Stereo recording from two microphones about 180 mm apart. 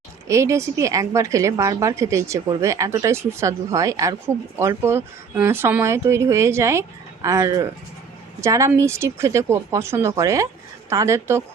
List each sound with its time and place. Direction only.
0.3 s a woman's voice: 15° right (ahead or behind)